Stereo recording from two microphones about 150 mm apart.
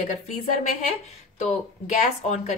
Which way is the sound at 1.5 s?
50° left (ahead or behind).